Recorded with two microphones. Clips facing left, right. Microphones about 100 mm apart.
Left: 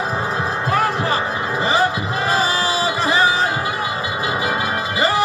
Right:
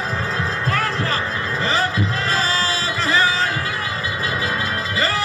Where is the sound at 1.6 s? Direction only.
15° left (ahead or behind).